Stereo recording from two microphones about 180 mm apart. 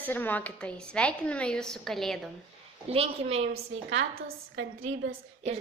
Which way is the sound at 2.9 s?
35° right (ahead or behind).